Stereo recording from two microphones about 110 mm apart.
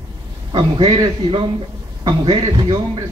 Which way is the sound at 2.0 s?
45° right (ahead or behind).